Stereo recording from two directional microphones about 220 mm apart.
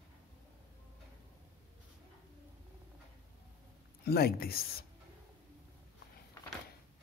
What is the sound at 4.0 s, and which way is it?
Speech, 45° left (ahead or behind).